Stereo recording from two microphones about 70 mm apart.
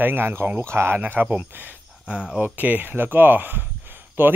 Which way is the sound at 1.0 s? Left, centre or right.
Right.